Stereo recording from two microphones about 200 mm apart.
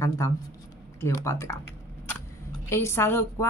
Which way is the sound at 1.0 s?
15° left (ahead or behind).